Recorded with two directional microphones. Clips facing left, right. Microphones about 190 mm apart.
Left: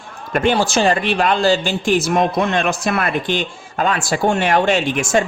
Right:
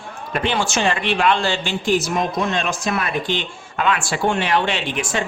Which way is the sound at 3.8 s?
40° left (ahead or behind).